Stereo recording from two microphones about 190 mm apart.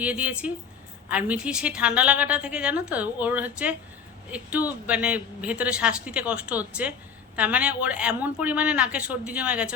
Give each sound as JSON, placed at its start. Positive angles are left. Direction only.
{"t": 0.0, "sound": "a woman's voice", "side_deg": -5}